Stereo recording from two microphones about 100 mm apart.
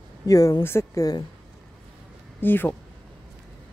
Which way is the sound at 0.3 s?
35° left (ahead or behind).